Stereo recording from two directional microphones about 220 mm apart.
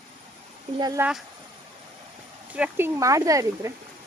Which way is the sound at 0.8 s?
15° right (ahead or behind).